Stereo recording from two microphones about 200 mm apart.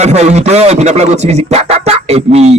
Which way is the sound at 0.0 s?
35° right (ahead or behind).